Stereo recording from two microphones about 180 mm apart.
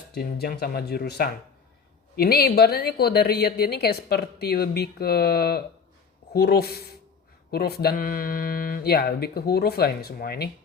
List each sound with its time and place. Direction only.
0.1 s a woman's voice: 60° left (ahead or behind)